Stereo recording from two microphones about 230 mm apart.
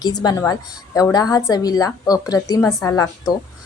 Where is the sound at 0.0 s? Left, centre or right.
Centre.